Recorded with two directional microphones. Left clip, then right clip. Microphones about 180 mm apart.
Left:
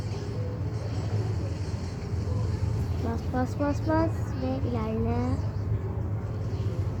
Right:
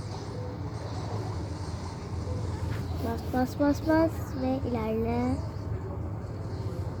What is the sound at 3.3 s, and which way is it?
Speech, 50° right (ahead or behind).